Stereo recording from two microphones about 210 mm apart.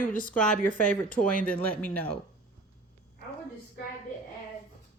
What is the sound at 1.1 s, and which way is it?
Speech, 40° left (ahead or behind).